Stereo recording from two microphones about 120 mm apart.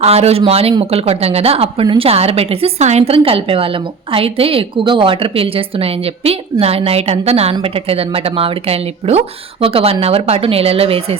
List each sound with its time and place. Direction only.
0.0 s speech: 60° right (ahead or behind)